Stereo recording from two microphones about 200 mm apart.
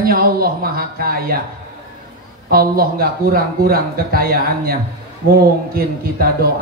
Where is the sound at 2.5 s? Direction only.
50° right (ahead or behind).